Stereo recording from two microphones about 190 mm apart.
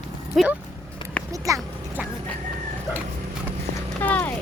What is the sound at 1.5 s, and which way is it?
Speech, 15° right (ahead or behind).